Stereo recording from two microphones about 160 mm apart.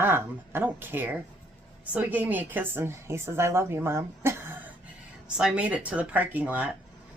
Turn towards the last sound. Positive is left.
turn(degrees=-10)  # may be behind; listen again after turning